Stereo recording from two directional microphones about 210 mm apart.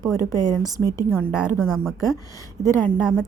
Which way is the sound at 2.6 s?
35° right (ahead or behind).